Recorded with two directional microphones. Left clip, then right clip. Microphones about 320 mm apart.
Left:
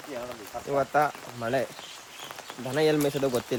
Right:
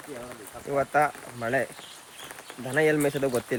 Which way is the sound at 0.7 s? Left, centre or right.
Centre.